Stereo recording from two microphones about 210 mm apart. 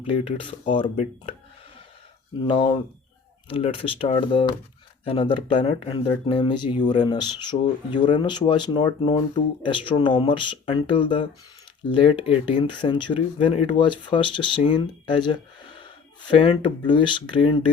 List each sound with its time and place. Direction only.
0.0 s speech: 25° left (ahead or behind)
2.5 s speech: 25° left (ahead or behind)